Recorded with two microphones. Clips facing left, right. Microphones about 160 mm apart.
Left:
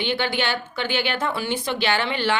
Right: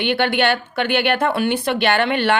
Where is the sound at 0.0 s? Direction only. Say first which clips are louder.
Right 6 dB; 60° right (ahead or behind).